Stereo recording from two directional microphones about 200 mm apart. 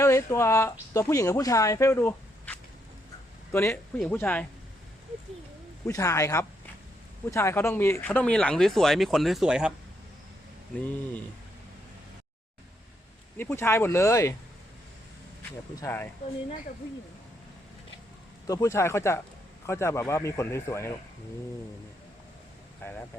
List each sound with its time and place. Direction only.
0.0 s speech: 15° left (ahead or behind)
5.8 s speech: 15° left (ahead or behind); by 9.7 s 5° right (ahead or behind)
13.3 s speech: 10° left (ahead or behind)
15.7 s speech: 15° left (ahead or behind)
18.4 s speech: 15° left (ahead or behind)
22.8 s speech: 10° left (ahead or behind)